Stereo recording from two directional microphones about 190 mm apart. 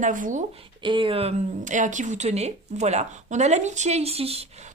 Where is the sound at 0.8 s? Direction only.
25° right (ahead or behind).